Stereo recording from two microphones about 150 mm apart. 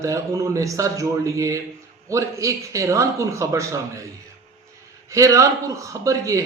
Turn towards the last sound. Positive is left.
turn(degrees=-20)  # may be behind; listen again after turning